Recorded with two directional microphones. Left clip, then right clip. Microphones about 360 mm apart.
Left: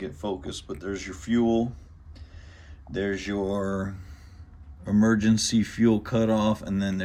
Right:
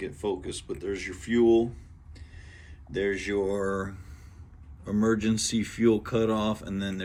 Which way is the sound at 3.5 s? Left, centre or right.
Centre.